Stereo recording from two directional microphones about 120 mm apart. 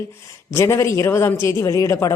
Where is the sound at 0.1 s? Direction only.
20° left (ahead or behind).